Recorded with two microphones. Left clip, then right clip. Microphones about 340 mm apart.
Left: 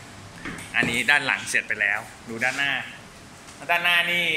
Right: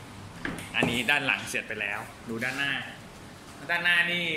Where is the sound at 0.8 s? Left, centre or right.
Centre.